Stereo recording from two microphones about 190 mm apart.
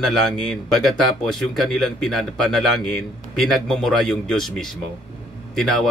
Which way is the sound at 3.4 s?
Centre (ahead or behind).